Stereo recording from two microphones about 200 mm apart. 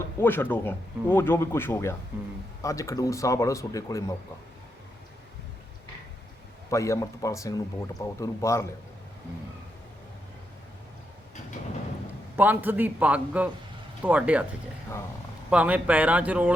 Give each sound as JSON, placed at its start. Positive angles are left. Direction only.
{"t": 0.0, "sound": "speech", "side_deg": 10}
{"t": 6.7, "sound": "speech", "side_deg": 15}
{"t": 12.4, "sound": "a man's voice", "side_deg": -10}
{"t": 15.4, "sound": "a man's voice", "side_deg": -5}